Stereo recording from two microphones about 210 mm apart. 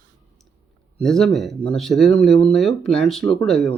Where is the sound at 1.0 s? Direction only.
Centre (ahead or behind).